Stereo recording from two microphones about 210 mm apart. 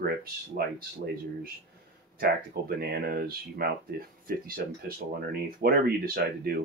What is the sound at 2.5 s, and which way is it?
Speech, 50° right (ahead or behind).